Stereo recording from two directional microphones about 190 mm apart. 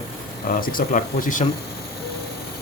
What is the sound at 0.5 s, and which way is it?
Speech, 45° left (ahead or behind).